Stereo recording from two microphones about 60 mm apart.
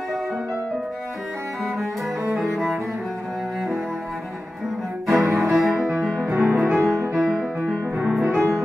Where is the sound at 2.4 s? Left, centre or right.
Centre.